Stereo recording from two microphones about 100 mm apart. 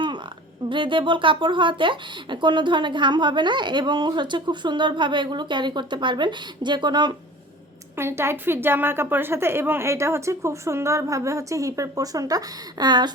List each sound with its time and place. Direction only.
0.7 s speech: 55° right (ahead or behind)
7.9 s a woman's voice: 25° right (ahead or behind); by 13.1 s 45° right (ahead or behind)